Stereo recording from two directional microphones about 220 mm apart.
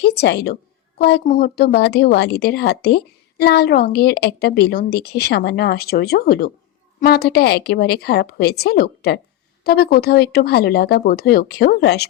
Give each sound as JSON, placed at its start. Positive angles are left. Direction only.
{"t": 0.0, "sound": "a woman's voice", "side_deg": 50}